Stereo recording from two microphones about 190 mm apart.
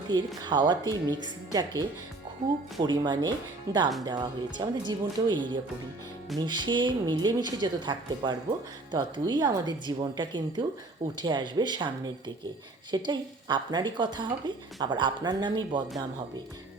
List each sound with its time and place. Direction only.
0.4 s speech: 25° right (ahead or behind)